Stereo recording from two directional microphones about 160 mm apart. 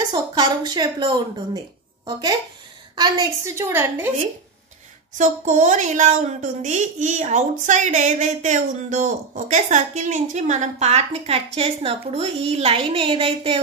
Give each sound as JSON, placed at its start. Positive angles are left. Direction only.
{"t": 0.1, "sound": "a woman's voice", "side_deg": -25}
{"t": 3.0, "sound": "a woman's voice", "side_deg": -20}
{"t": 5.1, "sound": "a woman's voice", "side_deg": -50}